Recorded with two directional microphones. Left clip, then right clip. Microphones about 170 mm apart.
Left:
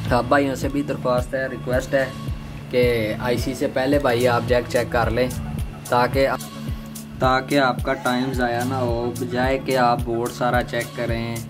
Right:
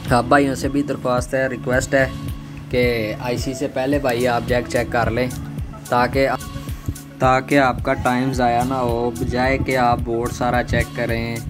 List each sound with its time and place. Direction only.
0.1 s speech: 25° right (ahead or behind)
1.1 s speech: 35° right (ahead or behind)
2.7 s speech: 15° right (ahead or behind)
9.7 s speech: 10° right (ahead or behind)
10.4 s speech: 20° right (ahead or behind)